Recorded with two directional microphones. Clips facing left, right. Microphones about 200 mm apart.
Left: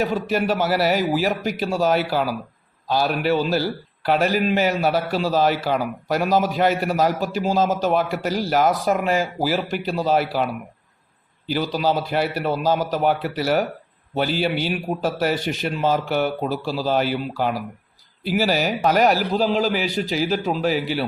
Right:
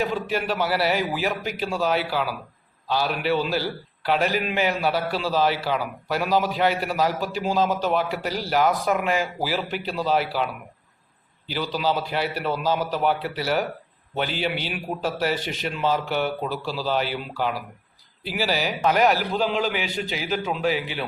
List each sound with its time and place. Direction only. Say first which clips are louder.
0.0 s a man's voice: left 4 dB; 45° left (ahead or behind)